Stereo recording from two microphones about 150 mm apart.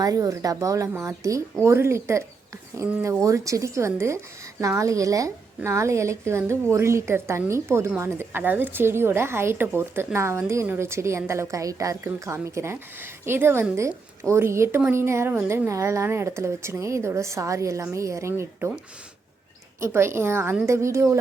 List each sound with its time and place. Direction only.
0.0 s a woman's voice: 25° right (ahead or behind)
3.2 s a woman's voice: 20° right (ahead or behind)
19.8 s speech: 15° right (ahead or behind)